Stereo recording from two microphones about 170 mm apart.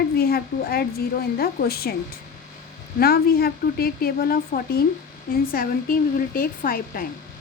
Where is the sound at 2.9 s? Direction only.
60° left (ahead or behind).